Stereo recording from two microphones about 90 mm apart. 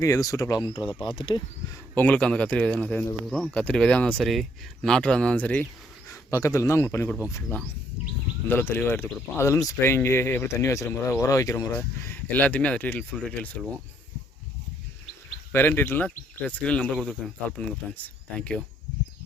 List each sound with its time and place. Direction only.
0.0 s a man's voice: 40° left (ahead or behind)
0.9 s speech: 65° left (ahead or behind)
2.0 s speech: 15° left (ahead or behind)
6.3 s a man's voice: 35° left (ahead or behind)
8.4 s speech: 25° left (ahead or behind)
12.3 s speech: 20° left (ahead or behind)
15.5 s speech: 20° left (ahead or behind)
16.9 s speech: 5° left (ahead or behind)